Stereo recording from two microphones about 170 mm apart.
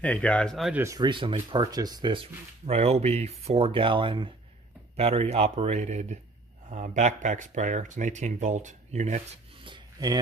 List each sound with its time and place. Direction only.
0.0 s speech: 10° left (ahead or behind)
0.7 s speech: 20° right (ahead or behind); by 9.2 s 45° right (ahead or behind)
9.6 s rub: 30° right (ahead or behind)